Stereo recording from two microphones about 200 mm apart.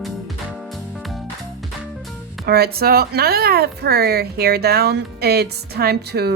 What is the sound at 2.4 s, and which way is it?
Speech, 50° right (ahead or behind).